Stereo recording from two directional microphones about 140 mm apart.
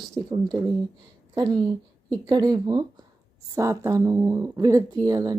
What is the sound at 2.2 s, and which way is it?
Speech, 25° right (ahead or behind).